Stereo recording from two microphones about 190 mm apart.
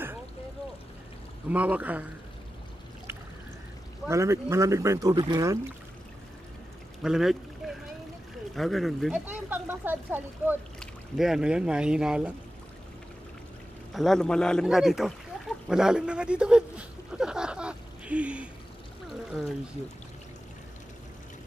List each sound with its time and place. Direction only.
1.5 s speech: 5° right (ahead or behind)
4.1 s speech: 15° right (ahead or behind)
7.0 s speech: centre (ahead or behind)
13.9 s speech: centre (ahead or behind)